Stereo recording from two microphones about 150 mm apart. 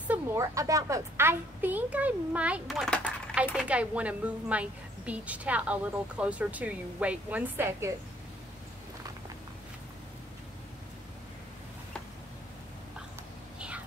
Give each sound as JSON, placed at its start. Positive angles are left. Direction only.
{"t": 0.1, "sound": "speech", "side_deg": -20}